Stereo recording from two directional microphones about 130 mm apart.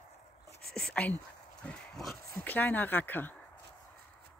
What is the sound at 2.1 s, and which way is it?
Speech, 15° left (ahead or behind).